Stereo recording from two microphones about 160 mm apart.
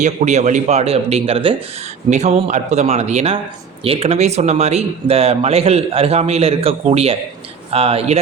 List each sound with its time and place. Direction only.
0.0 s speech: 50° right (ahead or behind)